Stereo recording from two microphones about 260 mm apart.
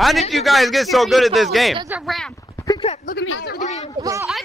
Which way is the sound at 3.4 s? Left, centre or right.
Left.